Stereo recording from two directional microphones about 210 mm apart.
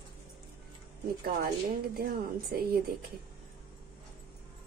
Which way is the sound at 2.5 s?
45° right (ahead or behind).